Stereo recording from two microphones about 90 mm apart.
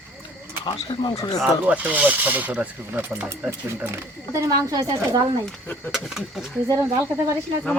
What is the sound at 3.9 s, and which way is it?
Speech, 40° right (ahead or behind).